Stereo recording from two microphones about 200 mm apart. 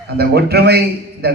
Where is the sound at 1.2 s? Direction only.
50° right (ahead or behind).